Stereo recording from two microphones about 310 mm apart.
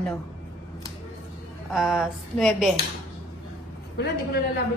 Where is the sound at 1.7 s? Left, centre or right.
Centre.